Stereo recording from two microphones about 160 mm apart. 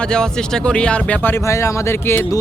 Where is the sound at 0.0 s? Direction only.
5° left (ahead or behind).